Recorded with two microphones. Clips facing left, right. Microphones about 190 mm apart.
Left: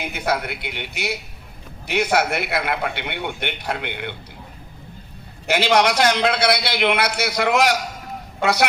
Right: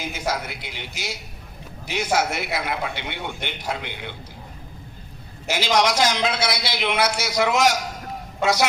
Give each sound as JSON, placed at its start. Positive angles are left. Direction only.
{"t": 0.0, "sound": "a man's voice", "side_deg": 60}
{"t": 5.5, "sound": "a man's voice", "side_deg": 60}